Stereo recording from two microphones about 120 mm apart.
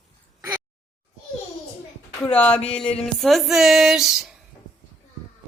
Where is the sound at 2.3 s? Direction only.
10° left (ahead or behind).